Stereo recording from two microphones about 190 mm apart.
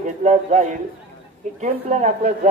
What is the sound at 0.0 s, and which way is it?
A man's voice, 40° right (ahead or behind).